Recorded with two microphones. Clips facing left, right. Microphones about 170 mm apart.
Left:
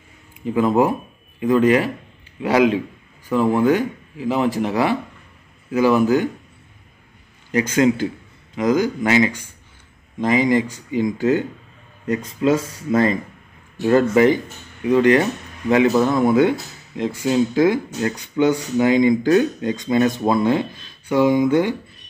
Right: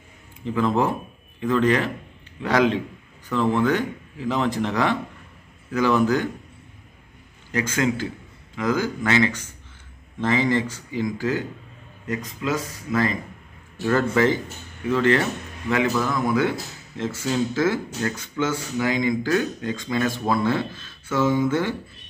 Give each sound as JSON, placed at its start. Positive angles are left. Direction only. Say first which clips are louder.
{"t": 0.6, "sound": "speech", "louder": "left 5 dB", "side_deg": 10}
{"t": 8.5, "sound": "speech", "louder": "left 5 dB", "side_deg": 15}
{"t": 15.9, "sound": "speech", "louder": "left 7 dB", "side_deg": 25}